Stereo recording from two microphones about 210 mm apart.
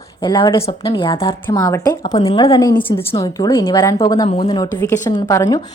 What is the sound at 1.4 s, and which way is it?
A woman's voice, 15° left (ahead or behind).